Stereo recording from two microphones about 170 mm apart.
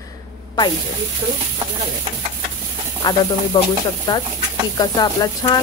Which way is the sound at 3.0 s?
25° left (ahead or behind).